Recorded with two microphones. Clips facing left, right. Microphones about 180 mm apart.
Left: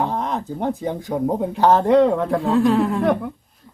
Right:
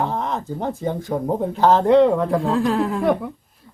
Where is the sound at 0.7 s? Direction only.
Centre (ahead or behind).